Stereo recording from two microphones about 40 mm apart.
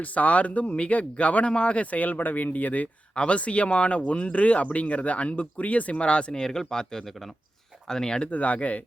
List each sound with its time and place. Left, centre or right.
0.0 s speech: left
6.4 s speech: centre
7.1 s speech: centre
7.9 s speech: centre
8.3 s speech: left